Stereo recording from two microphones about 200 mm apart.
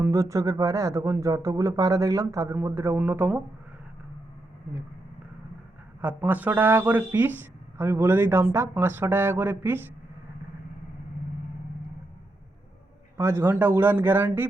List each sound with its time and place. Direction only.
0.0 s speech: 15° right (ahead or behind)
6.0 s speech: 10° right (ahead or behind)
13.1 s speech: 15° right (ahead or behind)